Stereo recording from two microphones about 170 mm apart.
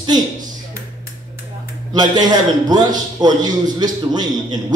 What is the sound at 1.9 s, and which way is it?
Speech, 25° right (ahead or behind).